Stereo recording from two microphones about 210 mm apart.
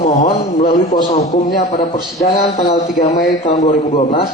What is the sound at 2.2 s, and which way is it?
A man's voice, 40° left (ahead or behind).